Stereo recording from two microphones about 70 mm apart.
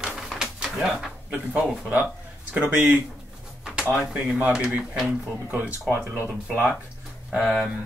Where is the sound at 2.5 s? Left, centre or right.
Right.